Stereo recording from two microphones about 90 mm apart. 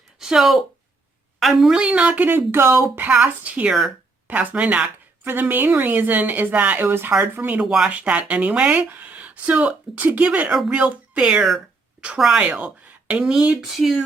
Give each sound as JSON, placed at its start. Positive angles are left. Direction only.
{"t": 0.2, "sound": "speech", "side_deg": -5}
{"t": 3.1, "sound": "a woman's voice", "side_deg": -15}
{"t": 7.6, "sound": "speech", "side_deg": -10}